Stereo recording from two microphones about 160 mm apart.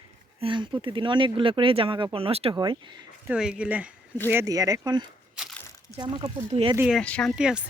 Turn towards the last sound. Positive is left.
turn(degrees=-5)  # may be behind; listen again after turning